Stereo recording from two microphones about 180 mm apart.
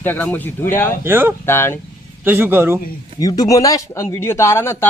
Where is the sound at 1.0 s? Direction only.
10° right (ahead or behind).